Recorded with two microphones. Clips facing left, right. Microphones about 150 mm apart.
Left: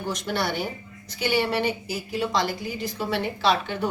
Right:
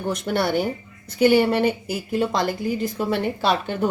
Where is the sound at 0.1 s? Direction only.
50° right (ahead or behind).